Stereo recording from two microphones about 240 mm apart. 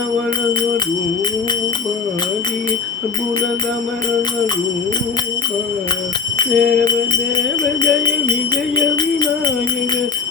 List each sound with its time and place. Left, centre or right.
6.4 s music: centre